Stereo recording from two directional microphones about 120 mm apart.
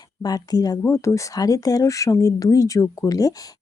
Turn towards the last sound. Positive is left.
turn(degrees=30)  # may be behind; listen again after turning